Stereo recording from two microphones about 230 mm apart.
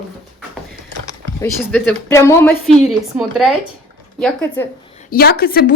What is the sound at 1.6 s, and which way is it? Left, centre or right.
Speech, centre.